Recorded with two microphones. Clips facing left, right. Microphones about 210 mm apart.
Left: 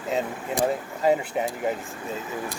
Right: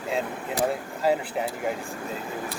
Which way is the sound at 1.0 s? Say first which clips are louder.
Left 2 dB; centre (ahead or behind).